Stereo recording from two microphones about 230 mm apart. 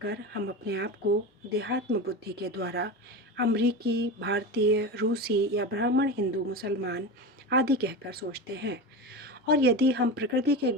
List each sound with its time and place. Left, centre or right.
0.0 s speech: right